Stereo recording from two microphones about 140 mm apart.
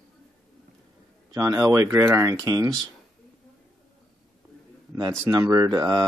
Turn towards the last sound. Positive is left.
turn(degrees=-25)  # may be behind; listen again after turning